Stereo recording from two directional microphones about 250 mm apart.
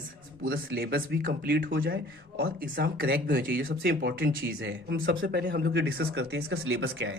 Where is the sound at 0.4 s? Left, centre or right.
Right.